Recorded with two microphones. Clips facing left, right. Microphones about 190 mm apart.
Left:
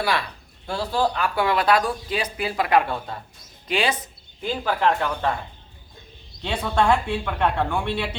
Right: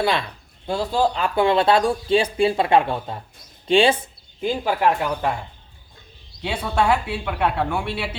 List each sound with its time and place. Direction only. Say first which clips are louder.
0.0 s speech: right 3 dB; 20° right (ahead or behind)
4.4 s speech: right 2 dB; 10° right (ahead or behind)
6.4 s speech: even; 10° right (ahead or behind)